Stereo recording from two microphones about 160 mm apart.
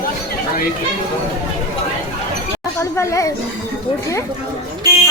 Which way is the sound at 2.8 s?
20° left (ahead or behind).